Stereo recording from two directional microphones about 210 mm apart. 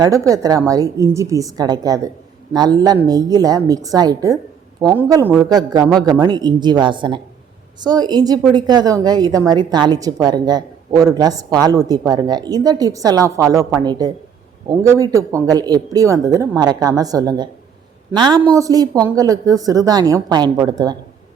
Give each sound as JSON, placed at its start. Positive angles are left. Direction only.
{"t": 0.0, "sound": "a woman's voice", "side_deg": -15}
{"t": 5.8, "sound": "speech", "side_deg": 0}
{"t": 6.1, "sound": "a woman's voice", "side_deg": -20}